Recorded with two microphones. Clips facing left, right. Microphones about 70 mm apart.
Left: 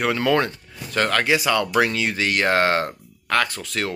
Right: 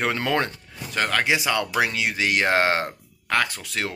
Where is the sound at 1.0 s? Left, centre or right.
Centre.